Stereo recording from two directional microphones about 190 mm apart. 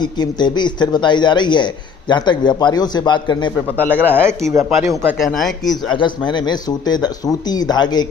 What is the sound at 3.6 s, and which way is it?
Speech, 10° left (ahead or behind).